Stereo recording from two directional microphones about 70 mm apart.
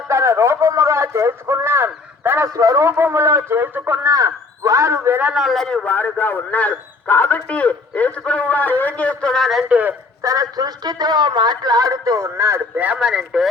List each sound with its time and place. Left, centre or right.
0.1 s a man's voice: right
2.5 s a man's voice: right
2.9 s a man's voice: right
4.1 s a man's voice: right
5.3 s speech: centre
5.8 s a man's voice: left
9.3 s speech: centre
9.6 s a man's voice: centre
10.2 s a man's voice: right
12.7 s a man's voice: right
13.0 s speech: centre